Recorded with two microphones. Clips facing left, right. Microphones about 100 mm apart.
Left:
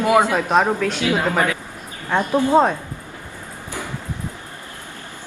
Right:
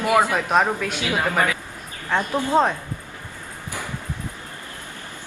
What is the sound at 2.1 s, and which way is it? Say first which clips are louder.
Speech: left 4 dB; 15° left (ahead or behind).